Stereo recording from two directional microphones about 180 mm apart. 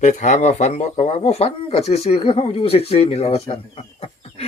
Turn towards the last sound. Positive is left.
turn(degrees=35)  # may be behind; listen again after turning